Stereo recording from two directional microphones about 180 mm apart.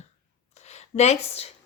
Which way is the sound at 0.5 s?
40° left (ahead or behind).